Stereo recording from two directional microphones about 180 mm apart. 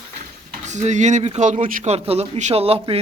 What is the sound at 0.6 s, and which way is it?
Speech, 40° right (ahead or behind).